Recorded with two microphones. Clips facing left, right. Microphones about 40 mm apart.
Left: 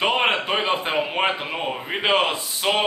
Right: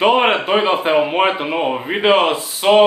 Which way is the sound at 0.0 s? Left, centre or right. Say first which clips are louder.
Right 7 dB; centre.